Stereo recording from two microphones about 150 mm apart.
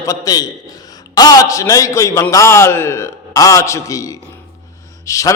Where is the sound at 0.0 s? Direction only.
20° left (ahead or behind).